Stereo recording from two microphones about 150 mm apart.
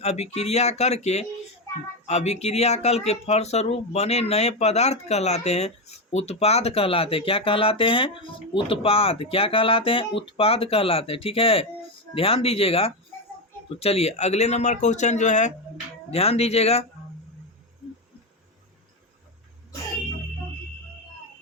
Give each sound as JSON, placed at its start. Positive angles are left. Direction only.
{"t": 0.0, "sound": "speech", "side_deg": 45}